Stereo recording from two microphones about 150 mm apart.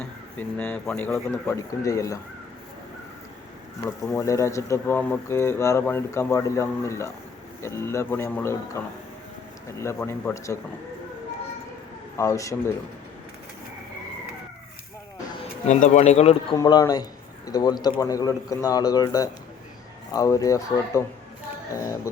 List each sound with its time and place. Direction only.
0.3 s speech: 10° left (ahead or behind)
3.8 s speech: 20° left (ahead or behind)
10.0 s speech: 10° left (ahead or behind)
10.3 s speech: 20° left (ahead or behind)
12.1 s speech: 20° left (ahead or behind)
15.6 s speech: 50° left (ahead or behind)
16.6 s speech: 25° left (ahead or behind)